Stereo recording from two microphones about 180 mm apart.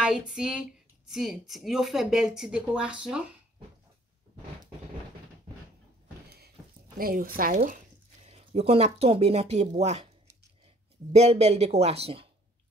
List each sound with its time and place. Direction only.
0.0 s speech: 5° right (ahead or behind)
6.2 s a sound: 65° right (ahead or behind)
7.0 s speech: 55° right (ahead or behind)
8.3 s speech: 35° right (ahead or behind)
11.1 s speech: 35° right (ahead or behind)